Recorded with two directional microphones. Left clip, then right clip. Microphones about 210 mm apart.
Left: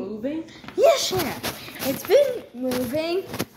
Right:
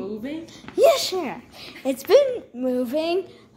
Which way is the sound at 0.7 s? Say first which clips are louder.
Right 1 dB; 10° right (ahead or behind).